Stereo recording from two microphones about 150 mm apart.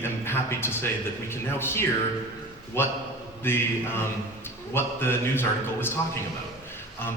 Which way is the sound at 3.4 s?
15° left (ahead or behind).